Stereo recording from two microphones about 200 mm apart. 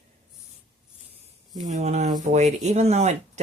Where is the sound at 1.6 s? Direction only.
35° right (ahead or behind).